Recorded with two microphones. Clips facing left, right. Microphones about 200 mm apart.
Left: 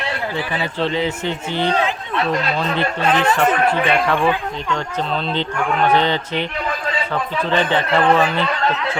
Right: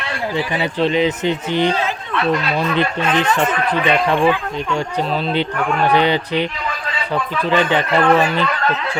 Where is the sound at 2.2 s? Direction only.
35° left (ahead or behind).